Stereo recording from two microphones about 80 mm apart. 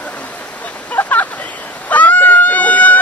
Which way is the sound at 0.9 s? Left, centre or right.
Left.